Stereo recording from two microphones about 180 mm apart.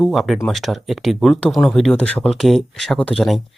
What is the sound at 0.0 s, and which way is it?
Speech, centre (ahead or behind).